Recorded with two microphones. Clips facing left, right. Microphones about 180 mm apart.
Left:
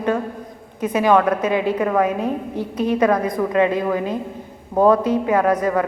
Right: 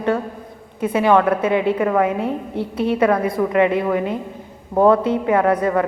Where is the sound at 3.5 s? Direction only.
20° right (ahead or behind).